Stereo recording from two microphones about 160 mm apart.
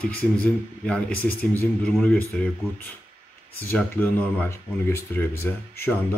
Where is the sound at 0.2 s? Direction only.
5° left (ahead or behind).